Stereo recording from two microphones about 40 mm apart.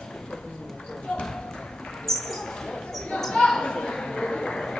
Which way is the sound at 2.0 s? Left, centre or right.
Centre.